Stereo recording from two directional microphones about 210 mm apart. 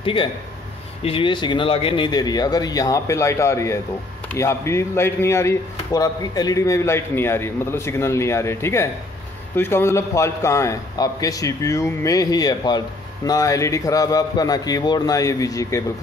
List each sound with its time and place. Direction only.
0.0 s a man's voice: 25° left (ahead or behind)